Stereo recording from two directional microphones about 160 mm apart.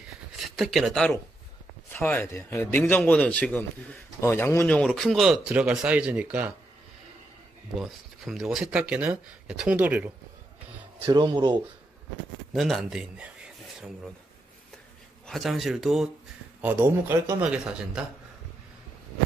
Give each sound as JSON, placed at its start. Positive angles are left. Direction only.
{"t": 0.6, "sound": "a man's voice", "side_deg": 0}
{"t": 7.7, "sound": "speech", "side_deg": 0}
{"t": 11.1, "sound": "speech", "side_deg": -30}
{"t": 12.5, "sound": "speech", "side_deg": 0}
{"t": 15.2, "sound": "speech", "side_deg": 0}
{"t": 16.6, "sound": "a man's voice", "side_deg": -15}